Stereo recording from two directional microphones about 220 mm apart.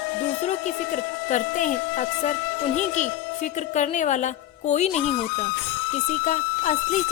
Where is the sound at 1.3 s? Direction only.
35° left (ahead or behind).